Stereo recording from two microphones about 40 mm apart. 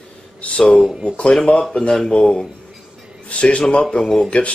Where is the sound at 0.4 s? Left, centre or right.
Left.